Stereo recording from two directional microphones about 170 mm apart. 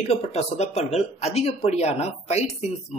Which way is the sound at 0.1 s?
40° left (ahead or behind).